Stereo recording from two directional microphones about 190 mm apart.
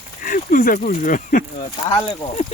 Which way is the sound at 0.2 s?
45° left (ahead or behind).